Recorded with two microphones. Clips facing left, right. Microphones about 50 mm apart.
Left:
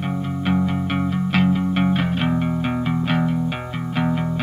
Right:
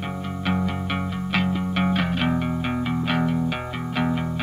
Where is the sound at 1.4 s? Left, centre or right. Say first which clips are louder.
Left 4 dB; centre.